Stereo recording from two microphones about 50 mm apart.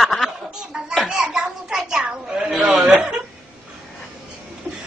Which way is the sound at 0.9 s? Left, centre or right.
Centre.